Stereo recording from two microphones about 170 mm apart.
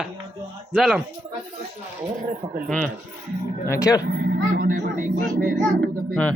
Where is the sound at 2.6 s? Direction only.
10° left (ahead or behind).